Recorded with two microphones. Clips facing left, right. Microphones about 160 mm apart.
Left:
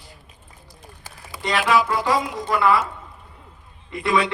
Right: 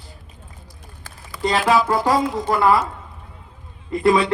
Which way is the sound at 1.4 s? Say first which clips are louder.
Right 2 dB; 30° right (ahead or behind).